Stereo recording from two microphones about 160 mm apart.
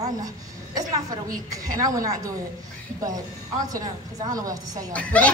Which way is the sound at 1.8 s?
20° right (ahead or behind).